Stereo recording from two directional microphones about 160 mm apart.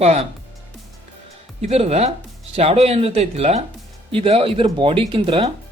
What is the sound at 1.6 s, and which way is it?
Speech, 40° right (ahead or behind).